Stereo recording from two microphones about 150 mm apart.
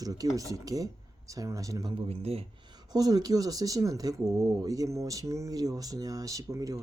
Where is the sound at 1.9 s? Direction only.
40° right (ahead or behind).